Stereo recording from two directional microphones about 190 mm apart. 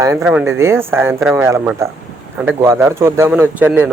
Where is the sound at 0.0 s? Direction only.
15° right (ahead or behind).